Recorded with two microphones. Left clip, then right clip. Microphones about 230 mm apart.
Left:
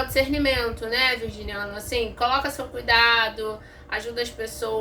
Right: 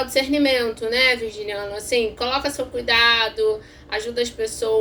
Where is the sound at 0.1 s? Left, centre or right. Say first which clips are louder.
Right 4 dB; centre.